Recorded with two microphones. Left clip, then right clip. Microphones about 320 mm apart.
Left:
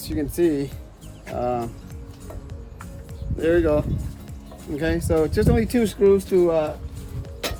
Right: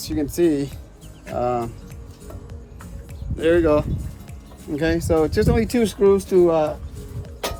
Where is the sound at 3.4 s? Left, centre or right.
Centre.